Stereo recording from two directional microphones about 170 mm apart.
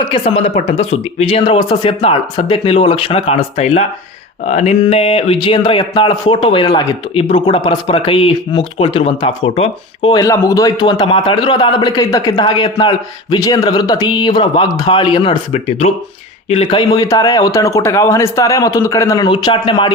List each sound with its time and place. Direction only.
0.1 s speech: 35° left (ahead or behind)